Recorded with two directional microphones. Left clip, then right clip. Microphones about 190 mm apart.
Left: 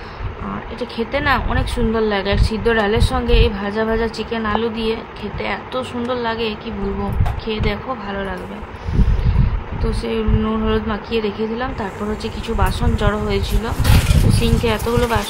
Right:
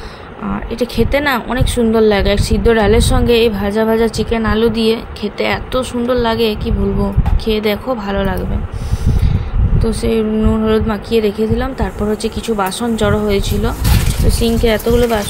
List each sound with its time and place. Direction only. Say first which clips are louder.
0.7 s speech: right 7 dB; 30° right (ahead or behind)
9.8 s speech: right 6 dB; 25° right (ahead or behind)